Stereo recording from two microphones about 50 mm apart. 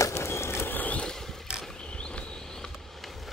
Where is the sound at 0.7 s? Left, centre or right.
Left.